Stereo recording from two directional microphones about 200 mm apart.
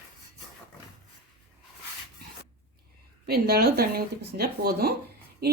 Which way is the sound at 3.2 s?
50° right (ahead or behind).